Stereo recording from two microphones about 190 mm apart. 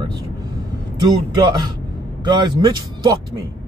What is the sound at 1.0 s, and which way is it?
Speech, 25° right (ahead or behind).